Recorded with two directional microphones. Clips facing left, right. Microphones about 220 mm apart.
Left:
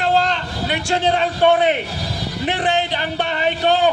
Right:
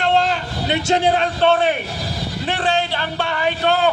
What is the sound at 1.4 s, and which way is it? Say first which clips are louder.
A man's voice: left 2 dB; 20° left (ahead or behind).